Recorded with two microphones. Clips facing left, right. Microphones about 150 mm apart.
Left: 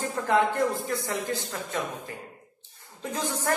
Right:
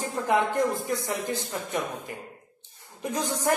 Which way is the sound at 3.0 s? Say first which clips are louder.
Right 2 dB; 15° right (ahead or behind).